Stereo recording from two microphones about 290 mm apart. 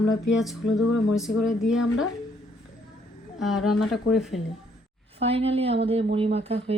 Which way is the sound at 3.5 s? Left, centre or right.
Left.